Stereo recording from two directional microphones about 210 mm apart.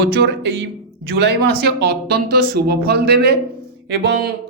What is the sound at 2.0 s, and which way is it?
Speech, 45° right (ahead or behind).